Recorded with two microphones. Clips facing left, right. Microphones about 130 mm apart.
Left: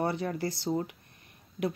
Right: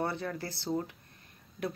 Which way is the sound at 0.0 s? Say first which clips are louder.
Left 4 dB; 15° left (ahead or behind).